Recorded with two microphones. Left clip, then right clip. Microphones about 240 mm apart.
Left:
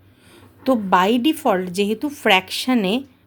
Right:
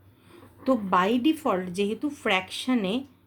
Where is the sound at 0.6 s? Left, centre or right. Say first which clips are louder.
Left 7 dB; left.